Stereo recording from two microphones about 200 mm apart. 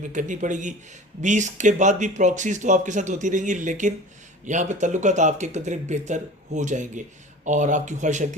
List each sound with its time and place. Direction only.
0.1 s speech: 40° right (ahead or behind)